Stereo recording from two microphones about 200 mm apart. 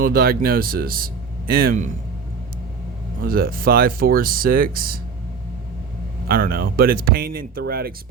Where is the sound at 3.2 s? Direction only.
45° right (ahead or behind).